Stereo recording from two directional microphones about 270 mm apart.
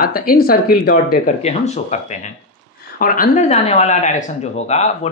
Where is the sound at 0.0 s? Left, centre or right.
Left.